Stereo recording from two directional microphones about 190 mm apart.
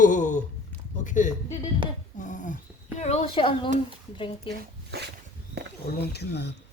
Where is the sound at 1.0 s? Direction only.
40° left (ahead or behind).